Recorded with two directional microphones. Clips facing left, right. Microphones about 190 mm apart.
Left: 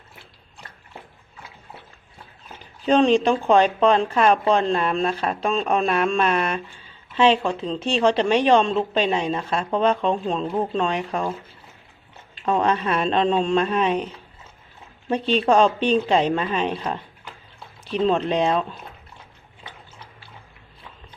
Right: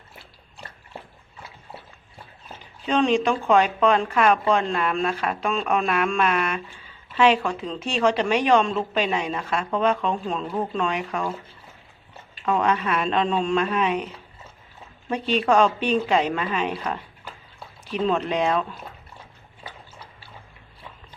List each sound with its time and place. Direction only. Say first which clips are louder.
2.8 s a woman's voice: left 4 dB; 35° left (ahead or behind)
12.5 s speech: left 1 dB; 30° left (ahead or behind)
15.1 s a woman's voice: left 2 dB; 30° left (ahead or behind)
18.0 s a woman's voice: left 2 dB; 30° left (ahead or behind)